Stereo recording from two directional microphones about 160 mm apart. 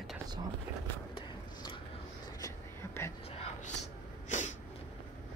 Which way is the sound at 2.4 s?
15° left (ahead or behind).